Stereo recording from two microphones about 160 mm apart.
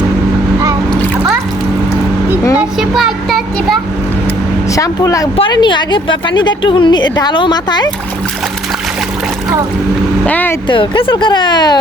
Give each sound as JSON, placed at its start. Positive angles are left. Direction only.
{"t": 2.6, "sound": "a sound", "side_deg": 0}
{"t": 4.7, "sound": "a woman's voice", "side_deg": 20}
{"t": 10.2, "sound": "speech", "side_deg": 10}
{"t": 10.7, "sound": "a woman's voice", "side_deg": 35}